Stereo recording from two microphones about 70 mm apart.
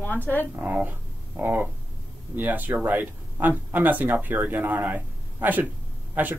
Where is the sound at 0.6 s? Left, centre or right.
Right.